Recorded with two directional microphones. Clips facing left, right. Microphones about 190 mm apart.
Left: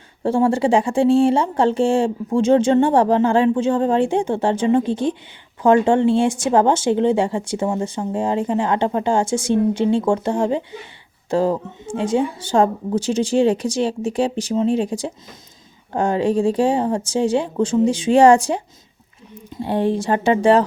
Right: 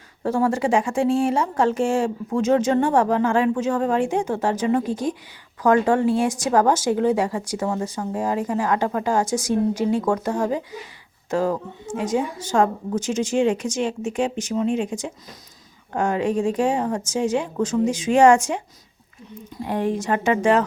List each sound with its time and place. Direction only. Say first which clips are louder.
0.2 s speech: left 4 dB; 30° left (ahead or behind)
19.6 s speech: left 4 dB; 30° left (ahead or behind)